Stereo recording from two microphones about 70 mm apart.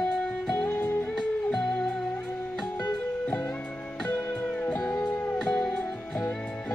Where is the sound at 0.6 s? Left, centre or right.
Left.